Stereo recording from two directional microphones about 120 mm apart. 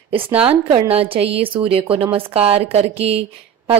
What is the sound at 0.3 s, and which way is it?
Speech, 10° right (ahead or behind).